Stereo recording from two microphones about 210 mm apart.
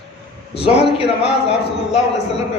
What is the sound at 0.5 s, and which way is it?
A man's voice, 25° left (ahead or behind).